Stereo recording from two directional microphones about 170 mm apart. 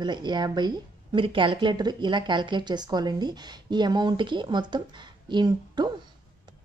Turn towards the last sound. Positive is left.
turn(degrees=-25)  # may be behind; listen again after turning